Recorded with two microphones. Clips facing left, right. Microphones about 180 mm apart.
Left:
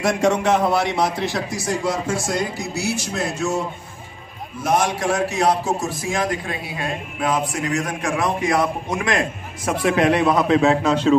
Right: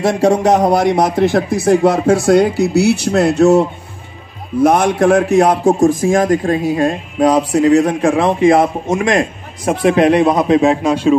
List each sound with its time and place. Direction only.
0.0 s a man's voice: 30° right (ahead or behind); by 3.6 s 65° right (ahead or behind)
4.6 s a man's voice: 55° right (ahead or behind); by 8.6 s 25° right (ahead or behind)
8.8 s a man's voice: 45° right (ahead or behind)
9.8 s a man's voice: 20° right (ahead or behind)